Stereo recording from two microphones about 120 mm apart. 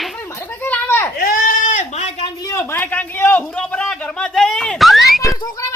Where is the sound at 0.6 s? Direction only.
15° left (ahead or behind).